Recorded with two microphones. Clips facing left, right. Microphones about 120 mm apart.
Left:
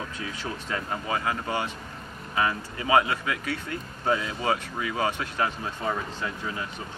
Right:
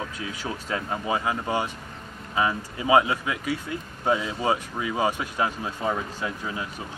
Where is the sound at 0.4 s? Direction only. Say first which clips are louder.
Right 3 dB; 15° right (ahead or behind).